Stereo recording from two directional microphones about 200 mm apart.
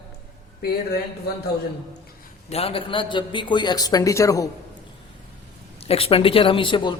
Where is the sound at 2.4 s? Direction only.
30° left (ahead or behind).